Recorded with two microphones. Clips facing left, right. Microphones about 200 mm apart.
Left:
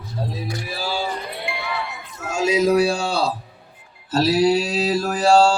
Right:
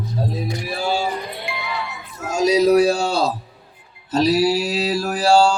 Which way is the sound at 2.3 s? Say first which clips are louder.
Right 3 dB; 35° right (ahead or behind).